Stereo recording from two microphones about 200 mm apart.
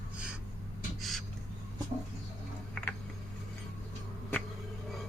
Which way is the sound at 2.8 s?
5° left (ahead or behind).